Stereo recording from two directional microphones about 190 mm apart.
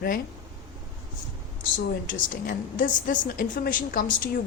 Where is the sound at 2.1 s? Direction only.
45° left (ahead or behind).